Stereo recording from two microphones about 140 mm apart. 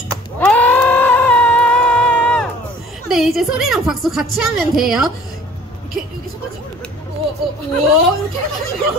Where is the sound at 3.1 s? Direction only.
Centre (ahead or behind).